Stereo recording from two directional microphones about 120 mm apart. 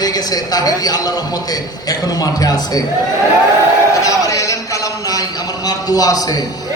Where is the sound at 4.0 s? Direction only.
30° left (ahead or behind).